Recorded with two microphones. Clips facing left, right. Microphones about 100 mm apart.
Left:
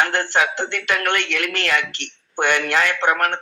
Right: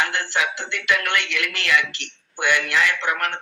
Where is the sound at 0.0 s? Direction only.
50° left (ahead or behind).